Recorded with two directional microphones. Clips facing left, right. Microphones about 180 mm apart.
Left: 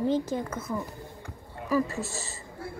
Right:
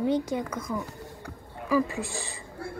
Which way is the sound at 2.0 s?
Centre (ahead or behind).